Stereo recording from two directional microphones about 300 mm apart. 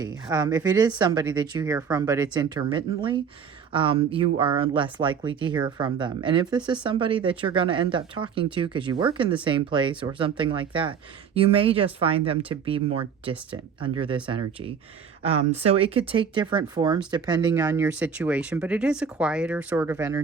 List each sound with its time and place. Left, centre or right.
0.3 s speech: centre